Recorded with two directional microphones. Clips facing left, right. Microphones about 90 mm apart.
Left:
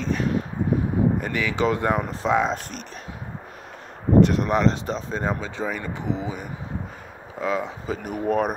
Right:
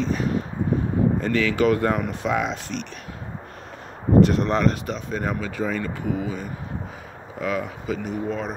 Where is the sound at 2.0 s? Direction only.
30° left (ahead or behind).